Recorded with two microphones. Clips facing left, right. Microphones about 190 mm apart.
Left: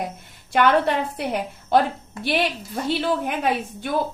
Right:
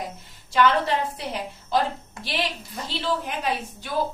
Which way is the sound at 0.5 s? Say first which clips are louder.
Left 2 dB; 55° left (ahead or behind).